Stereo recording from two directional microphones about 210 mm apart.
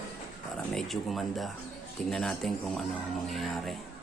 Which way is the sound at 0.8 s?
Centre (ahead or behind).